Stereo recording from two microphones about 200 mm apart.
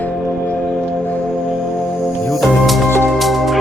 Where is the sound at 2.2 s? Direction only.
Centre (ahead or behind).